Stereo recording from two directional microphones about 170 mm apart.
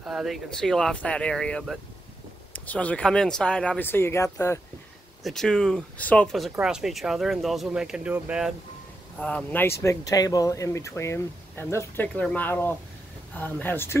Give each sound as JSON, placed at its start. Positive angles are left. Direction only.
{"t": 0.0, "sound": "speech", "side_deg": -5}
{"t": 5.2, "sound": "speech", "side_deg": 5}
{"t": 9.2, "sound": "speech", "side_deg": 10}